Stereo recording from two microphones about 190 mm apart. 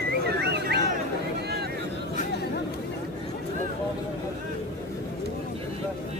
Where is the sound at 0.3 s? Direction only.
60° right (ahead or behind).